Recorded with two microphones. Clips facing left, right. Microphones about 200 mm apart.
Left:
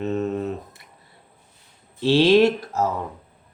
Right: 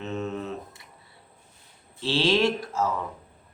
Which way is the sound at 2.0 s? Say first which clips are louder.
Left 8 dB; 15° left (ahead or behind).